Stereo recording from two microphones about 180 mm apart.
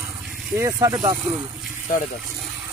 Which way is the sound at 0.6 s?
20° right (ahead or behind).